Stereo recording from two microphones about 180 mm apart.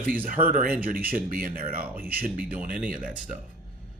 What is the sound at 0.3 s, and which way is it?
Speech, 50° right (ahead or behind).